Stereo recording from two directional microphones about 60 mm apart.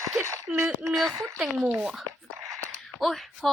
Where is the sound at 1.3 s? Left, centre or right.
Centre.